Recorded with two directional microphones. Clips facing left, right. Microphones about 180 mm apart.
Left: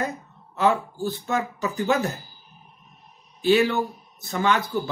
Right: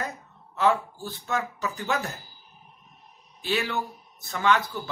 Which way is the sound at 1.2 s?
5° left (ahead or behind).